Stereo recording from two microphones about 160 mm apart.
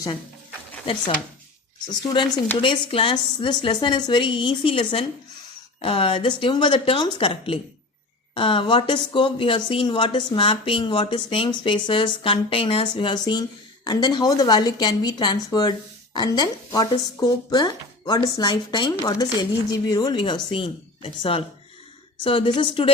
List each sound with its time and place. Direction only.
2.6 s speech: 35° left (ahead or behind)